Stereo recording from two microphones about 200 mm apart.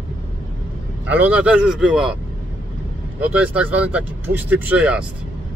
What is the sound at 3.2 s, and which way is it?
Speech, 5° right (ahead or behind).